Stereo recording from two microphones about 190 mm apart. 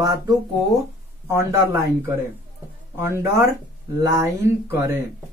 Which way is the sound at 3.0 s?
15° right (ahead or behind).